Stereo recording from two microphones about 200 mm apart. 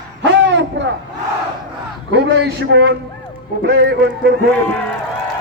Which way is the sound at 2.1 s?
60° right (ahead or behind).